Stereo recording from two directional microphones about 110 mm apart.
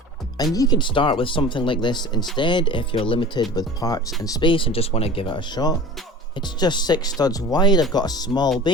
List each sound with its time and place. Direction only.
0.5 s speech: 30° left (ahead or behind)
0.8 s speech: 50° left (ahead or behind)
3.5 s speech: 35° left (ahead or behind)
4.4 s speech: 50° left (ahead or behind)